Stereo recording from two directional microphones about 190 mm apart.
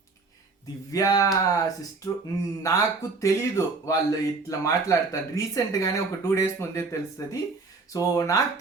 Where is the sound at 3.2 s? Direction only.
15° left (ahead or behind).